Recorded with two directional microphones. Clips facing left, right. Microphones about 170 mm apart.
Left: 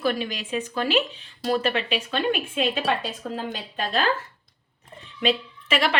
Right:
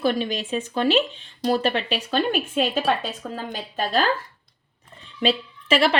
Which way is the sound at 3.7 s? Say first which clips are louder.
Right 4 dB; 40° right (ahead or behind).